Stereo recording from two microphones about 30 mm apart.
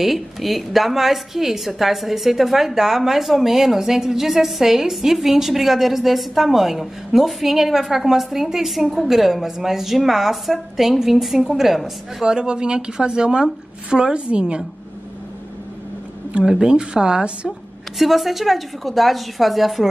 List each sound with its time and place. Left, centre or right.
0.0 s a woman's voice: centre
12.3 s speech: right
16.6 s speech: right
17.9 s a woman's voice: centre